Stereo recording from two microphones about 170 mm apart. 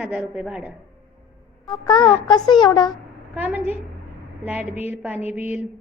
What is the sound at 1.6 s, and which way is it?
A child's voice, 25° left (ahead or behind).